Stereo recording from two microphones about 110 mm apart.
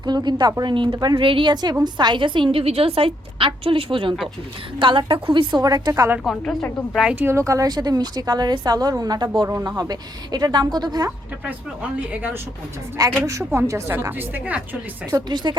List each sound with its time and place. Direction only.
0.0 s a woman's voice: 40° right (ahead or behind)
6.2 s a woman's voice: 5° left (ahead or behind)
7.2 s a woman's voice: 25° right (ahead or behind)
11.9 s speech: 15° right (ahead or behind)
13.0 s a woman's voice: 35° right (ahead or behind); by 14.8 s 15° right (ahead or behind)
15.4 s a woman's voice: 40° right (ahead or behind)